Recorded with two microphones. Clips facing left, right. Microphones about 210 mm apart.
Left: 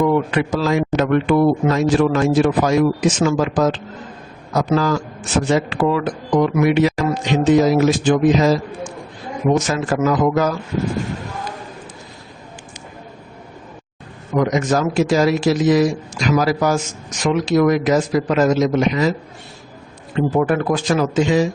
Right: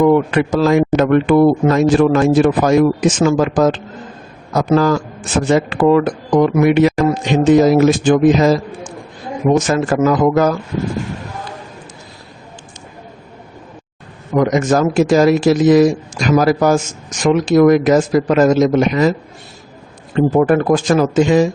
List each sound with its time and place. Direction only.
0.0 s speech: 50° right (ahead or behind)
9.6 s speech: 50° right (ahead or behind)
14.3 s speech: 50° right (ahead or behind)
20.1 s speech: 45° right (ahead or behind)